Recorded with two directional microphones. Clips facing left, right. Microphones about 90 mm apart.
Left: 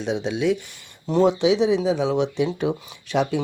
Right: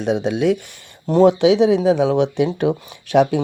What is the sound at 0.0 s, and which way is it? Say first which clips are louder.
Speech: right 5 dB; 50° right (ahead or behind).